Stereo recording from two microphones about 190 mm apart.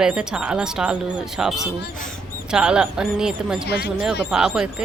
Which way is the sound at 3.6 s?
55° left (ahead or behind).